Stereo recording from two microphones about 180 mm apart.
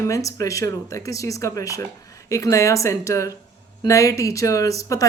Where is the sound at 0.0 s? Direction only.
20° left (ahead or behind).